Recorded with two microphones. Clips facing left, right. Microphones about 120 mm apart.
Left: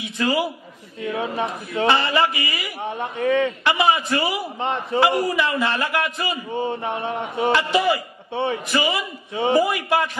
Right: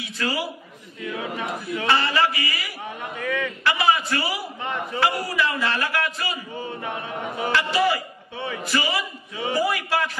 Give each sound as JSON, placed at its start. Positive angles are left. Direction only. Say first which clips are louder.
{"t": 0.0, "sound": "a man's voice", "louder": "left 5 dB", "side_deg": 20}